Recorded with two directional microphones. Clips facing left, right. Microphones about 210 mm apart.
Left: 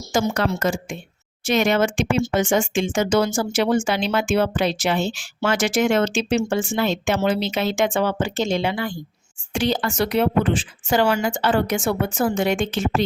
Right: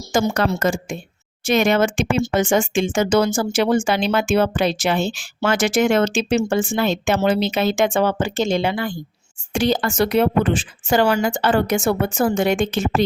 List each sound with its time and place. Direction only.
0.1 s speech: 45° right (ahead or behind)